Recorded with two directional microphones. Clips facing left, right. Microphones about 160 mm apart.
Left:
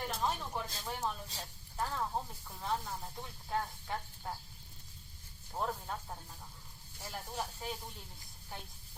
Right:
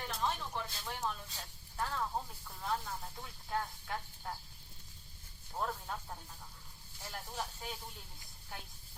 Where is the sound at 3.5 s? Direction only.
5° left (ahead or behind).